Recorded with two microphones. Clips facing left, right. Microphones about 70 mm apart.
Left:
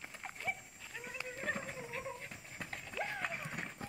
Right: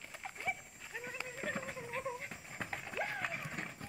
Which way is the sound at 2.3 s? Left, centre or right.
Right.